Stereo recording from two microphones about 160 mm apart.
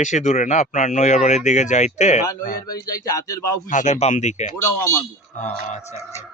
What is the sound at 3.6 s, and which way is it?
Speech, 50° left (ahead or behind).